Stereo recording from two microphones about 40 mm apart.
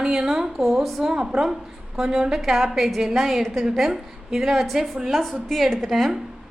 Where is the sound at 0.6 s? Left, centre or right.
Centre.